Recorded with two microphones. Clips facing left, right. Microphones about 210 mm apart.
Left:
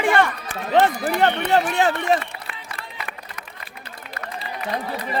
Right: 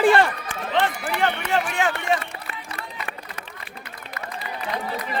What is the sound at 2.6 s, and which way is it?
Run, 30° right (ahead or behind).